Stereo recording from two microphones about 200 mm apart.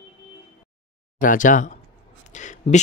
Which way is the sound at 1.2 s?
40° left (ahead or behind).